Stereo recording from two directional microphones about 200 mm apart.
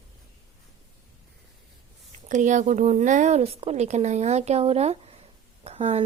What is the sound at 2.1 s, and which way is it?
Speech, 35° right (ahead or behind).